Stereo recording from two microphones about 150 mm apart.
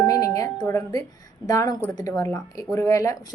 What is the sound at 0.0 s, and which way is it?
Music, 20° left (ahead or behind).